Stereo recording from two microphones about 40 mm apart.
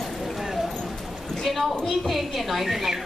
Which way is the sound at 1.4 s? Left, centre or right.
Centre.